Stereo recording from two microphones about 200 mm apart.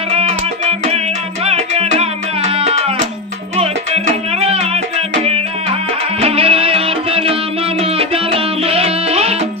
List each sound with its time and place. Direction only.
0.1 s music: 30° right (ahead or behind)